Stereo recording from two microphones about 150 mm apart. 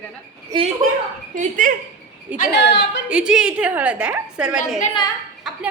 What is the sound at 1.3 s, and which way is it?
Speech, 60° right (ahead or behind).